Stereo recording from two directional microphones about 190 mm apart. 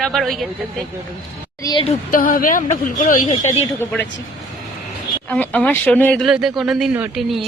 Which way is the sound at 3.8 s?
10° left (ahead or behind).